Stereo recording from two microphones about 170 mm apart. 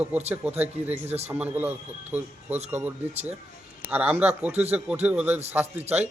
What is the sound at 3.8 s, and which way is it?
A man's voice, 10° right (ahead or behind).